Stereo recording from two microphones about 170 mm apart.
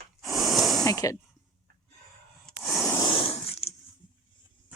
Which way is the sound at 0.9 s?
20° left (ahead or behind).